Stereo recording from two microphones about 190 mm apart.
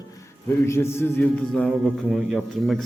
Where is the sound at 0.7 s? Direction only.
15° left (ahead or behind).